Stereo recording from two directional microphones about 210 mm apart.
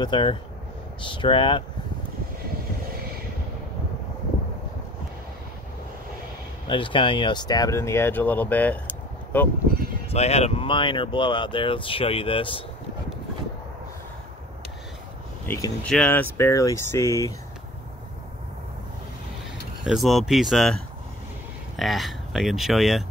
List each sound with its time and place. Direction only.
0.0 s speech: 20° left (ahead or behind)
6.7 s speech: 25° left (ahead or behind); by 9.5 s 10° left (ahead or behind)
10.0 s speech: 30° left (ahead or behind)
15.4 s speech: 10° left (ahead or behind)
19.8 s speech: centre (ahead or behind)
21.7 s speech: centre (ahead or behind)